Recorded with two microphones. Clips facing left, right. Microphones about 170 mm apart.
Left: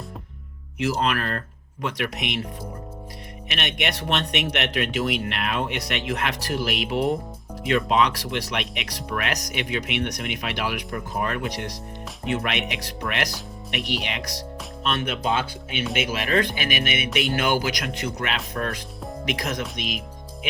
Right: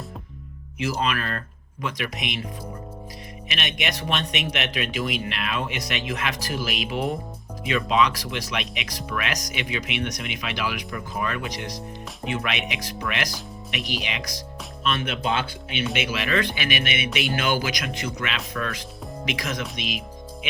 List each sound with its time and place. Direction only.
0.8 s speech: 65° left (ahead or behind)
3.5 s speech: 60° left (ahead or behind)
16.0 s speech: 50° left (ahead or behind)